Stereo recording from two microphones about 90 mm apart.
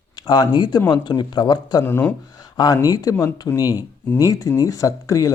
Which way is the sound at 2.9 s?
45° left (ahead or behind).